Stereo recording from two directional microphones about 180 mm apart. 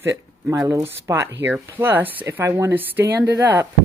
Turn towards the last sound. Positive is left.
turn(degrees=-10)  # may be behind; listen again after turning